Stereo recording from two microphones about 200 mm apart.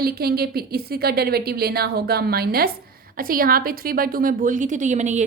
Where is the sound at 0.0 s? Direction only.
50° right (ahead or behind).